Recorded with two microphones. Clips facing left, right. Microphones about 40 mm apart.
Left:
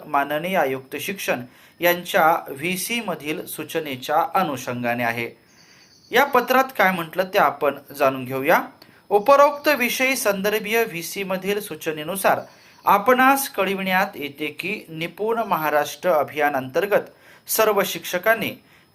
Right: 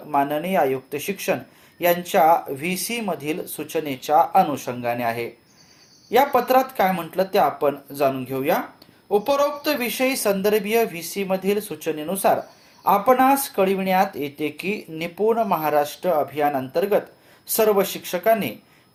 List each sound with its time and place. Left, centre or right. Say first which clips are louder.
0.1 s speech: even; left
6.3 s speech: even; left
8.1 s speech: left 2 dB; left
9.7 s speech: left 2 dB; left
12.1 s speech: even; left
12.8 s speech: left 1 dB; left
15.8 s speech: left 1 dB; left
17.5 s speech: even; left